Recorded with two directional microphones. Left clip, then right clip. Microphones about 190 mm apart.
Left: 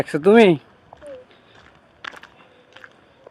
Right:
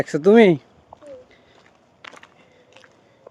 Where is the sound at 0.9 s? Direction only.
5° left (ahead or behind).